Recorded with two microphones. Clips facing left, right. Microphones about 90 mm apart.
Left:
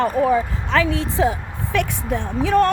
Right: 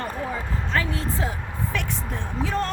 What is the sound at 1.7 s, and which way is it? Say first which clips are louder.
Speech: left 12 dB; 60° left (ahead or behind).